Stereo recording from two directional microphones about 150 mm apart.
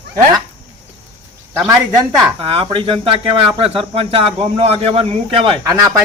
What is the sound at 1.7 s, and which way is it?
Speech, 20° right (ahead or behind).